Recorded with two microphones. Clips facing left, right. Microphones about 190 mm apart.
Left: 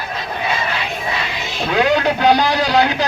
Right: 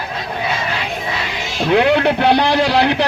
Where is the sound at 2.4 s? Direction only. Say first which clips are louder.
Right 2 dB; 25° right (ahead or behind).